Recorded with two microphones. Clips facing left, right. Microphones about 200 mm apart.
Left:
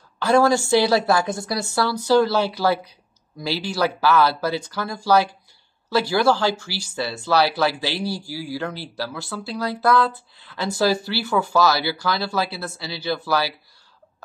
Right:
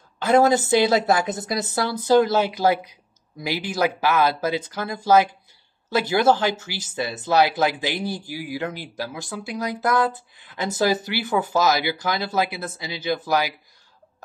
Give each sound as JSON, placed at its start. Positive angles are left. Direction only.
{"t": 0.2, "sound": "speech", "side_deg": -20}